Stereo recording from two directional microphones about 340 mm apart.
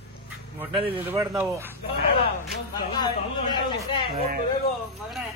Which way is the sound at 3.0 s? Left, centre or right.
Centre.